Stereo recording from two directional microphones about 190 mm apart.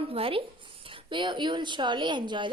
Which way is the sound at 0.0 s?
30° right (ahead or behind).